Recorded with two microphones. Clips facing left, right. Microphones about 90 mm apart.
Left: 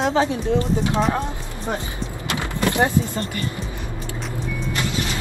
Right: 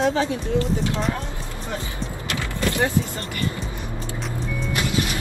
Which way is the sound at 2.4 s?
20° left (ahead or behind).